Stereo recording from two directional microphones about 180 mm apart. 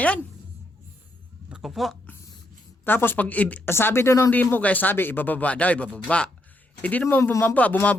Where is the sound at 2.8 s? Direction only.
10° left (ahead or behind).